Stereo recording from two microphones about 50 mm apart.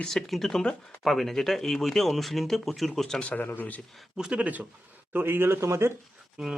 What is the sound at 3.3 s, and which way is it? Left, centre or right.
Speech, left.